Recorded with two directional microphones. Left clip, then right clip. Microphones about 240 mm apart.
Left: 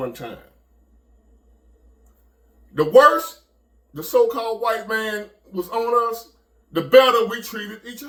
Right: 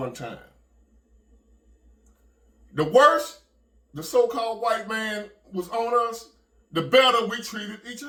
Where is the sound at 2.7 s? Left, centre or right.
Centre.